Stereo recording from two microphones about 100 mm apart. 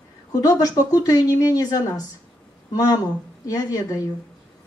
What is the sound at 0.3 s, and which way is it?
A woman's voice, 40° left (ahead or behind).